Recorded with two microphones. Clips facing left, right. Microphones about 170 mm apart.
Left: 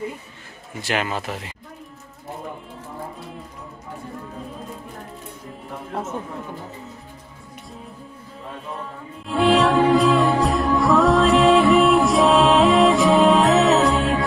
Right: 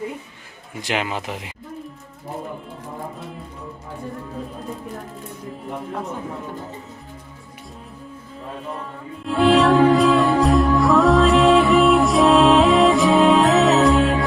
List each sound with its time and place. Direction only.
0.7 s a man's voice: 15° right (ahead or behind)
8.7 s music: centre (ahead or behind)